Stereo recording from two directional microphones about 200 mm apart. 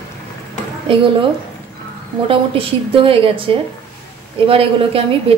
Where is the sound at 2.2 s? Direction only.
25° right (ahead or behind).